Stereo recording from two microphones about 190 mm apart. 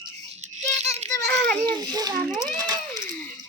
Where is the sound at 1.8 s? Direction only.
20° right (ahead or behind).